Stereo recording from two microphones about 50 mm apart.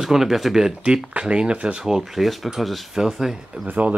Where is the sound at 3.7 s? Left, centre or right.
Right.